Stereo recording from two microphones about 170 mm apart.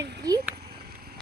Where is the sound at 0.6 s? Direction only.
70° right (ahead or behind).